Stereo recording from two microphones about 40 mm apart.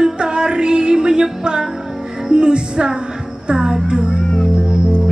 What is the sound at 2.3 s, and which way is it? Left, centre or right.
Speech, right.